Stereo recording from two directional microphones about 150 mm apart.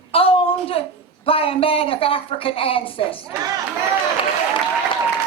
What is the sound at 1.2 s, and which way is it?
Speech, 40° left (ahead or behind).